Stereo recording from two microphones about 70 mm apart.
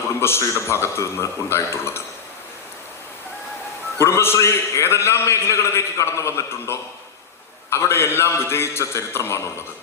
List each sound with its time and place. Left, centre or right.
0.2 s a man's voice: left
4.0 s a man's voice: left